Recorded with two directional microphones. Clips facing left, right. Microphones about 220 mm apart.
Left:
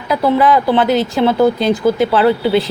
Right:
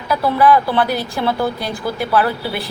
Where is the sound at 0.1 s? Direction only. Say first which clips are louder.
Left 2 dB; 20° left (ahead or behind).